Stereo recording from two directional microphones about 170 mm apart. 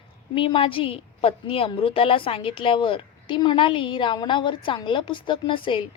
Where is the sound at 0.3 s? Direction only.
30° left (ahead or behind).